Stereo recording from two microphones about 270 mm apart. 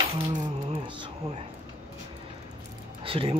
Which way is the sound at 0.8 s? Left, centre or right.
Centre.